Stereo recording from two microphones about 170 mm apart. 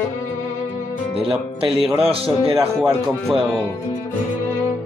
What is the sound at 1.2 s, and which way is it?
Speech, 35° right (ahead or behind).